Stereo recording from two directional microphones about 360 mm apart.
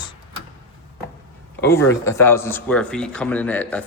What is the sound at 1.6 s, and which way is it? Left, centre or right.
Speech, centre.